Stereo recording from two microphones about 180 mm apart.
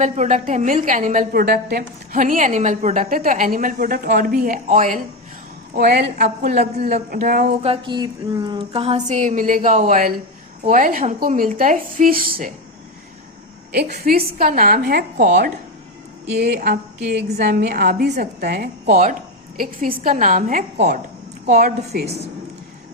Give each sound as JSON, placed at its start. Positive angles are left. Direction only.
{"t": 0.0, "sound": "a woman's voice", "side_deg": -45}
{"t": 5.7, "sound": "a woman's voice", "side_deg": -60}
{"t": 6.6, "sound": "speech", "side_deg": -40}
{"t": 7.1, "sound": "a woman's voice", "side_deg": -50}
{"t": 7.6, "sound": "a woman's voice", "side_deg": -30}
{"t": 13.7, "sound": "a woman's voice", "side_deg": -65}
{"t": 16.4, "sound": "a woman's voice", "side_deg": -60}
{"t": 20.1, "sound": "a woman's voice", "side_deg": -50}
{"t": 21.4, "sound": "a woman's voice", "side_deg": -60}